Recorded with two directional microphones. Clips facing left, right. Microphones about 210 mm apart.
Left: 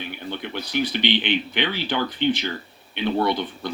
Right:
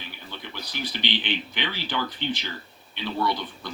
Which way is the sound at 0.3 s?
60° left (ahead or behind).